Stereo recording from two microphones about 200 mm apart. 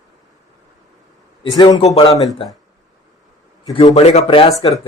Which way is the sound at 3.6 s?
25° left (ahead or behind).